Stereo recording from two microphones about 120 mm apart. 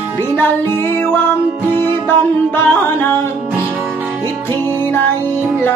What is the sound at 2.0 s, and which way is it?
Music, 20° left (ahead or behind).